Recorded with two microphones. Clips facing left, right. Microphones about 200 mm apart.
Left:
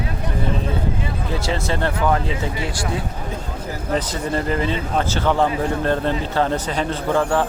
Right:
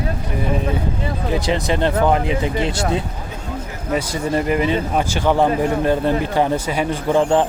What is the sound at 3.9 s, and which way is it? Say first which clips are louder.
Speech: right 3 dB; 10° right (ahead or behind).